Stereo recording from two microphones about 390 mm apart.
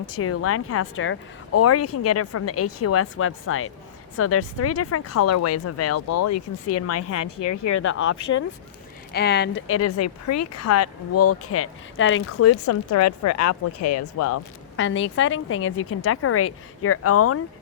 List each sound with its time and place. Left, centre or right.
0.1 s speech: left